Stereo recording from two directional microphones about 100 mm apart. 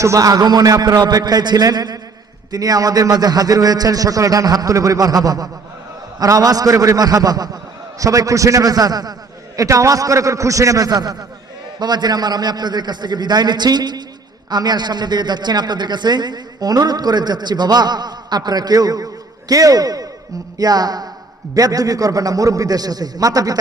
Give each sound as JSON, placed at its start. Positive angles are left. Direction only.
{"t": 0.0, "sound": "a man's voice", "side_deg": -35}